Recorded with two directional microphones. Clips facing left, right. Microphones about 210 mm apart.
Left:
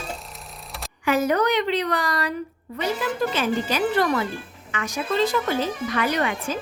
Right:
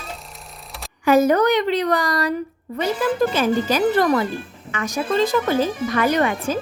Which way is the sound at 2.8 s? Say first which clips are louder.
Right 5 dB; 45° right (ahead or behind).